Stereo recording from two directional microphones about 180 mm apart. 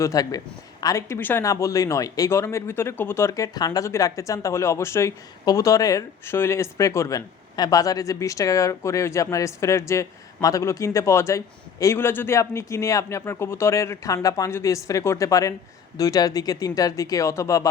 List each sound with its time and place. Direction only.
0.0 s speech: 20° left (ahead or behind)